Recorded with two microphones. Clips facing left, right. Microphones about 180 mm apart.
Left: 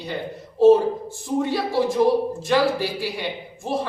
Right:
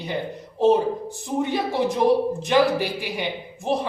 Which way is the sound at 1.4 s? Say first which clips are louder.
Even; 20° right (ahead or behind).